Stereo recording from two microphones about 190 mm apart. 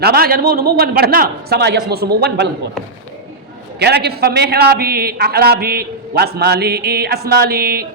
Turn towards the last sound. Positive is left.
turn(degrees=-55)  # may be behind; listen again after turning